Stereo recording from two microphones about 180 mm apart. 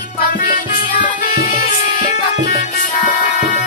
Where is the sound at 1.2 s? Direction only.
55° left (ahead or behind).